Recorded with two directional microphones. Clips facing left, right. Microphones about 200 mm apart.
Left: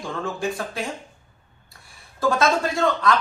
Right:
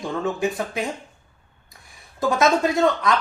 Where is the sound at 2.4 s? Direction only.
20° right (ahead or behind).